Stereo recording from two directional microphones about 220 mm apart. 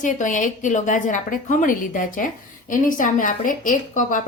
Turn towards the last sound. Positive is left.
turn(degrees=35)  # may be behind; listen again after turning